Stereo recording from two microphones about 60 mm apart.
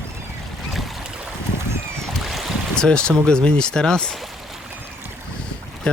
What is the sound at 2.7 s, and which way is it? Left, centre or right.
Speech, centre.